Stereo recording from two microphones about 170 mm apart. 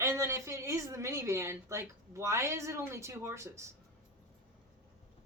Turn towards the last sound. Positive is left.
turn(degrees=-15)  # may be behind; listen again after turning